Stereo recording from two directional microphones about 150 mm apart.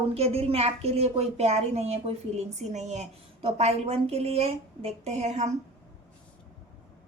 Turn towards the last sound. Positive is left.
turn(degrees=-50)  # may be behind; listen again after turning